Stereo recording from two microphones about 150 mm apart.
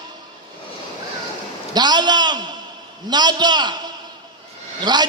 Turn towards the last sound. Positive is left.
turn(degrees=-30)  # may be behind; listen again after turning